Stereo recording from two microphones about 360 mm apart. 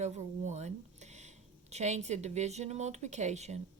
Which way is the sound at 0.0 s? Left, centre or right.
Centre.